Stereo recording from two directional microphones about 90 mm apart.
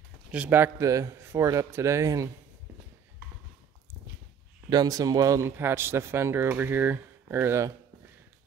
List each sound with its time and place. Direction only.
0.3 s speech: 20° right (ahead or behind)
0.8 s speech: 35° right (ahead or behind)
4.6 s speech: 45° right (ahead or behind)
5.4 s speech: 25° right (ahead or behind)